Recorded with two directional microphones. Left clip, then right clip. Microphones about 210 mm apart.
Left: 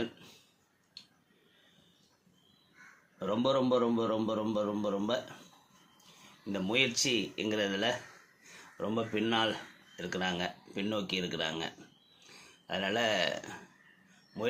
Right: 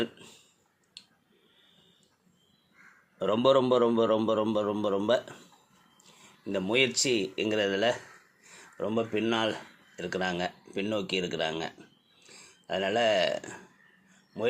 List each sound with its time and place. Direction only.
0.0 s a sound: 35° right (ahead or behind)
3.2 s a man's voice: 40° right (ahead or behind)
6.5 s speech: 30° right (ahead or behind)